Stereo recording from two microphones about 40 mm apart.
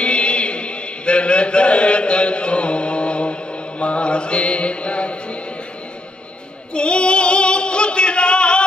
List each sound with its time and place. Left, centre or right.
0.0 s chant: left
3.8 s mantra: left
6.7 s female singing: left